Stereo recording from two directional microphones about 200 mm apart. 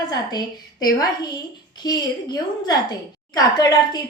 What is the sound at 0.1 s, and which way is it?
A woman's voice, 20° left (ahead or behind).